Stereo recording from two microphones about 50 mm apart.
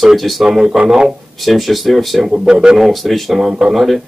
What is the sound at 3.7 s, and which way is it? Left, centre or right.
Speech, centre.